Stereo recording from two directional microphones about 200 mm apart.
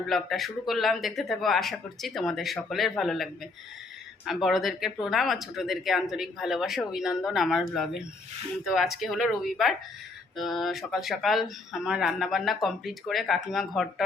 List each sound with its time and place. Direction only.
0.1 s speech: centre (ahead or behind)
4.4 s speech: centre (ahead or behind)